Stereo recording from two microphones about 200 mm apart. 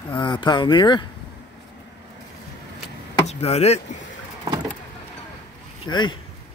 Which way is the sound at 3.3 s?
30° left (ahead or behind).